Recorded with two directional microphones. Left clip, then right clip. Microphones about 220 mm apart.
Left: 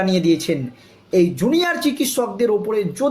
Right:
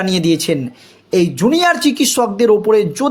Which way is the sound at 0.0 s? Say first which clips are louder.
Right 2 dB; 45° right (ahead or behind).